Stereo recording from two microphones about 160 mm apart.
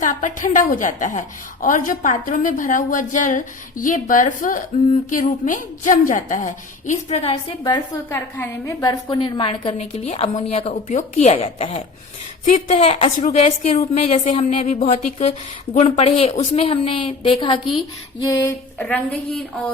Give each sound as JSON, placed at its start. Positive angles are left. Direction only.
{"t": 0.0, "sound": "a woman's voice", "side_deg": 55}
{"t": 7.1, "sound": "a woman's voice", "side_deg": 40}
{"t": 8.1, "sound": "a woman's voice", "side_deg": 15}
{"t": 10.8, "sound": "a woman's voice", "side_deg": 50}
{"t": 12.5, "sound": "a woman's voice", "side_deg": 50}
{"t": 18.3, "sound": "speech", "side_deg": 20}
{"t": 18.8, "sound": "a woman's voice", "side_deg": 5}